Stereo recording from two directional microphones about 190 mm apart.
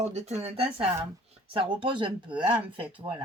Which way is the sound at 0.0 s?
35° right (ahead or behind).